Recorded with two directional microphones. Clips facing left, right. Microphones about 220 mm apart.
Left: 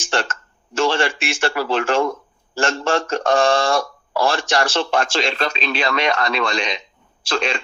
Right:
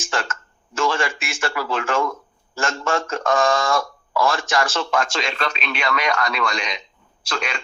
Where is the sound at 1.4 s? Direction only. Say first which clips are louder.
Left 4 dB; 30° left (ahead or behind).